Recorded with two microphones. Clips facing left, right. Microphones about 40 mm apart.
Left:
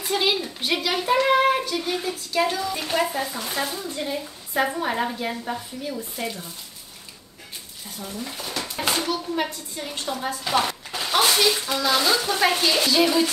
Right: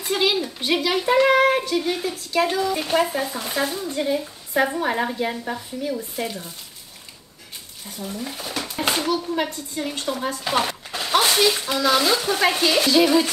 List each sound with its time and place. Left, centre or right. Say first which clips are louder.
0.0 s a woman's voice: right 2 dB; centre
8.0 s a woman's voice: right 2 dB; centre